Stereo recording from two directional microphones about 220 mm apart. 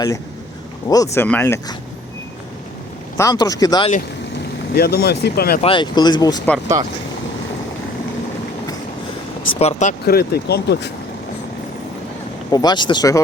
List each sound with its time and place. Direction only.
0.9 s speech: 15° left (ahead or behind)
3.2 s speech: 15° left (ahead or behind)
4.7 s speech: 45° left (ahead or behind)
5.6 s speech: 20° left (ahead or behind)
9.6 s speech: 30° left (ahead or behind); by 10.9 s 50° left (ahead or behind)
12.5 s speech: 20° left (ahead or behind)